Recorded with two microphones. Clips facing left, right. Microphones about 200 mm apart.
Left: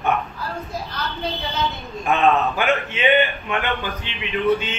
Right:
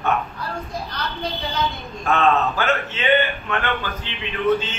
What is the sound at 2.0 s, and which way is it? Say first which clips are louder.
A man's voice: left 1 dB; 15° left (ahead or behind).